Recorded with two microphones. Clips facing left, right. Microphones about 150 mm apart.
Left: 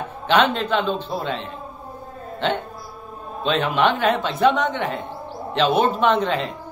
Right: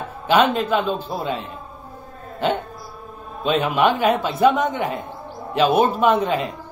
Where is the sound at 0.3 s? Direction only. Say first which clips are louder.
Right 2 dB; 10° right (ahead or behind).